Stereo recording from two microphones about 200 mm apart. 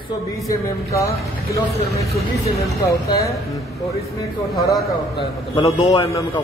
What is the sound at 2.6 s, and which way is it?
Speech, 15° left (ahead or behind).